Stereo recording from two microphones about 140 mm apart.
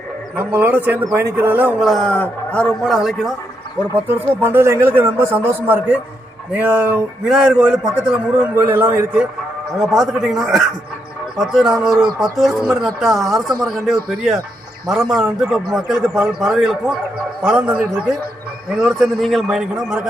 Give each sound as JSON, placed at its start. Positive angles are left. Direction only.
{"t": 0.3, "sound": "speech", "side_deg": -15}
{"t": 1.8, "sound": "a man's voice", "side_deg": 0}
{"t": 3.9, "sound": "a man's voice", "side_deg": -15}
{"t": 9.7, "sound": "a man's voice", "side_deg": -5}
{"t": 13.1, "sound": "speech", "side_deg": -25}
{"t": 14.8, "sound": "a man's voice", "side_deg": -5}
{"t": 18.8, "sound": "a man's voice", "side_deg": 0}